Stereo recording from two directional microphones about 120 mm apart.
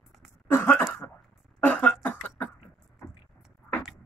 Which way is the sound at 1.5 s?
15° left (ahead or behind).